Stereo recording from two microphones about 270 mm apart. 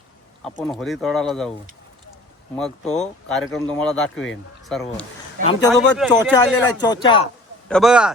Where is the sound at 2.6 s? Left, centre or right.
Centre.